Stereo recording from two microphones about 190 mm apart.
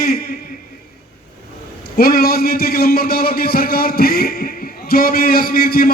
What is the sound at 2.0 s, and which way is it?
A man's voice, 55° left (ahead or behind).